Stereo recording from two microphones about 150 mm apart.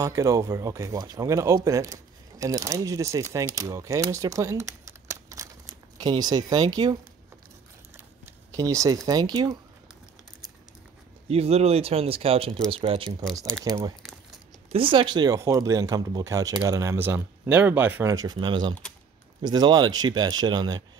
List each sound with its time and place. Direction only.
0.0 s speech: 20° right (ahead or behind)
8.5 s speech: 20° right (ahead or behind)
11.2 s speech: 45° right (ahead or behind)
13.7 s speech: 25° right (ahead or behind); by 18.1 s 10° right (ahead or behind)
18.1 s speech: 25° right (ahead or behind)